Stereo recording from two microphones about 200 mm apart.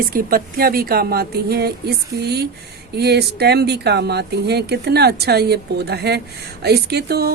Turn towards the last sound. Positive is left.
turn(degrees=-50)  # may be behind; listen again after turning